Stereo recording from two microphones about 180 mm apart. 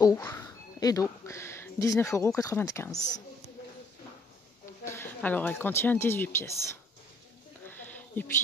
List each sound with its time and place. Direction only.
0.0 s speech: 15° left (ahead or behind)
4.8 s speech: 10° left (ahead or behind)
7.6 s a sound: 10° left (ahead or behind)